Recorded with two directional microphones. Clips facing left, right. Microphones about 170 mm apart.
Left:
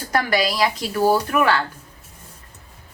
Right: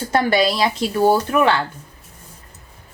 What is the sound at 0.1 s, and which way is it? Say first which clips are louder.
A woman's voice: right 3 dB; 25° right (ahead or behind).